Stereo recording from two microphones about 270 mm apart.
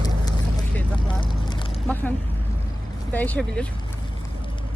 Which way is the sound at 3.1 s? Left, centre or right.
Centre.